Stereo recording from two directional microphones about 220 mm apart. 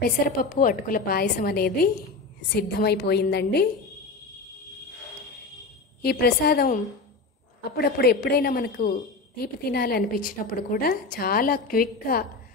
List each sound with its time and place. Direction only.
0.4 s a woman's voice: 40° left (ahead or behind)
6.0 s a woman's voice: 45° left (ahead or behind)